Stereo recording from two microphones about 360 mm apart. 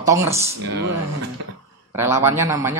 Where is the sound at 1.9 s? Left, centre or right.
Centre.